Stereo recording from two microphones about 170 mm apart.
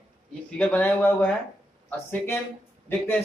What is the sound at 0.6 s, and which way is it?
Speech, 10° left (ahead or behind).